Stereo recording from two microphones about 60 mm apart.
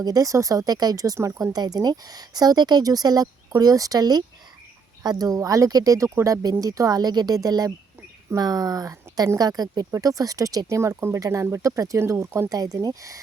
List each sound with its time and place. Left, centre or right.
0.0 s speech: right
1.5 s speech: right
10.8 s speech: right
11.9 s speech: right
12.5 s speech: right